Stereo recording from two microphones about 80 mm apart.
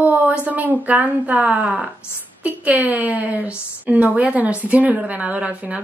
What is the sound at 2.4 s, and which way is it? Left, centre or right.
A woman's voice, right.